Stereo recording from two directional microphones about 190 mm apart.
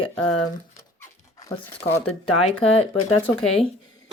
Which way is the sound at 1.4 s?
20° left (ahead or behind).